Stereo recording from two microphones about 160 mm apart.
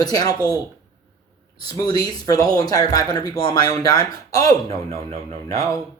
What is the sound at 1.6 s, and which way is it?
Speech, 20° left (ahead or behind).